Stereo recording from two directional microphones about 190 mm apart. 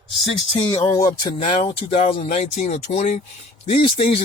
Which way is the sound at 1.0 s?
25° left (ahead or behind).